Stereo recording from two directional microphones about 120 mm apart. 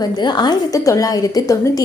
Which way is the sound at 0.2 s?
40° left (ahead or behind).